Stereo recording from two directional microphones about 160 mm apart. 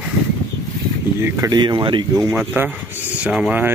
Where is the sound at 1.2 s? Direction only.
20° right (ahead or behind).